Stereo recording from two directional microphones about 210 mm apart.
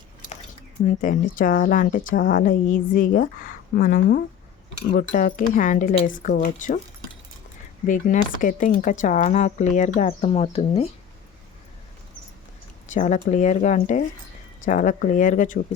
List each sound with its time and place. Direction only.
0.9 s a woman's voice: 40° left (ahead or behind)
7.9 s a woman's voice: 40° left (ahead or behind)
12.9 s a woman's voice: 35° left (ahead or behind)